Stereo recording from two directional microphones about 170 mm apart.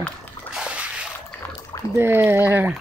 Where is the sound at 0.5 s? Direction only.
5° right (ahead or behind).